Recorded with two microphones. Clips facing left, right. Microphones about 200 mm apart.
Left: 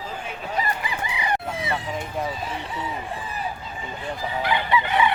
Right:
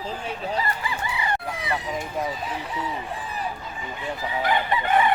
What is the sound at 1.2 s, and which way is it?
Chicken, 25° left (ahead or behind).